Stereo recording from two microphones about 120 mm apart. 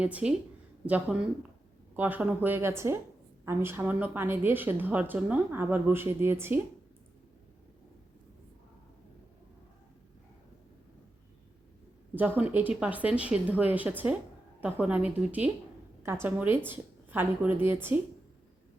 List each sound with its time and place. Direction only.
0.0 s a woman's voice: 10° right (ahead or behind)
12.1 s a woman's voice: 15° right (ahead or behind)